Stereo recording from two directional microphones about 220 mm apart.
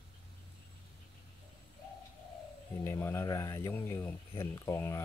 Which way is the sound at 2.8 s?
10° left (ahead or behind).